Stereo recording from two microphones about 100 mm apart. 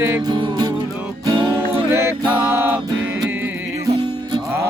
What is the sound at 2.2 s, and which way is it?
Mantra, 20° right (ahead or behind).